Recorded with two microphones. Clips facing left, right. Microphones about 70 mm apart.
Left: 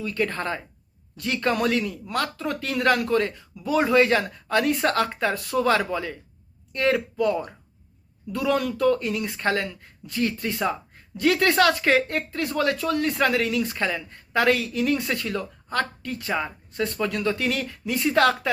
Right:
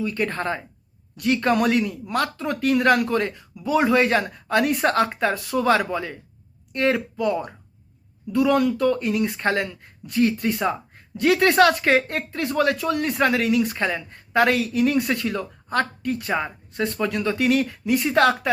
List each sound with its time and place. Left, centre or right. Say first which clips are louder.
0.0 s speech: right 2 dB; right